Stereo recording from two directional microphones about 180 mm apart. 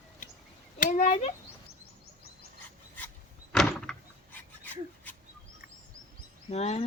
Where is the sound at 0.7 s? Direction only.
50° left (ahead or behind).